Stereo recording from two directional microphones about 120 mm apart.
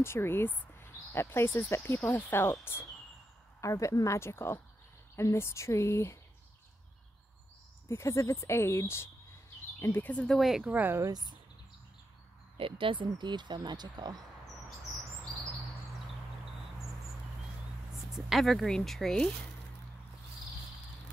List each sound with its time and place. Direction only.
0.0 s speech: 20° left (ahead or behind)
7.9 s speech: 25° left (ahead or behind); by 11.1 s 15° right (ahead or behind)
11.1 s speech: 35° right (ahead or behind)
12.5 s speech: 45° right (ahead or behind)
18.1 s speech: centre (ahead or behind)